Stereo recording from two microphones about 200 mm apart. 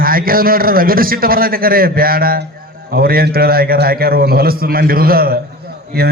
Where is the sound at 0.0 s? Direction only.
45° right (ahead or behind).